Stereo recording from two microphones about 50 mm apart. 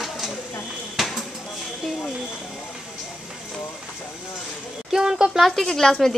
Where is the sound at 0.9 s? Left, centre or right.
Centre.